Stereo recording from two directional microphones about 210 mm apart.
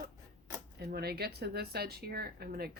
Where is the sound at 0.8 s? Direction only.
50° right (ahead or behind).